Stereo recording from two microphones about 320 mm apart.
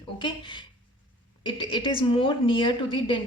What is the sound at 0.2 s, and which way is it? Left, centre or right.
A woman's voice, centre.